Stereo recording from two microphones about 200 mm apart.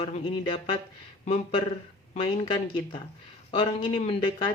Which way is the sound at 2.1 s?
30° left (ahead or behind).